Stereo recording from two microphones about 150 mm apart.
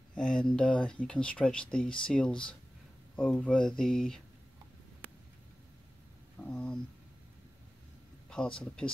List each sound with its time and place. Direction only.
0.1 s speech: 5° left (ahead or behind)
6.5 s speech: 5° left (ahead or behind)
8.3 s speech: 5° left (ahead or behind)